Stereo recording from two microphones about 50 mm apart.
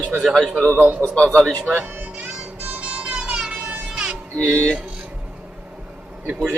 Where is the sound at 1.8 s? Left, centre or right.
Right.